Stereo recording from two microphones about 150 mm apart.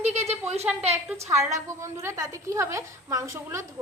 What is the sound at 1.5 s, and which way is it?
A woman's voice, 20° right (ahead or behind).